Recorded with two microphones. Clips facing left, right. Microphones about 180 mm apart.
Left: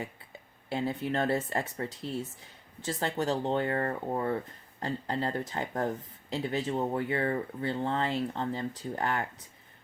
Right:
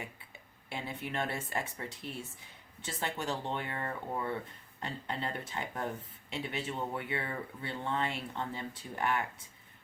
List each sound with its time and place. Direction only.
0.7 s speech: 30° left (ahead or behind)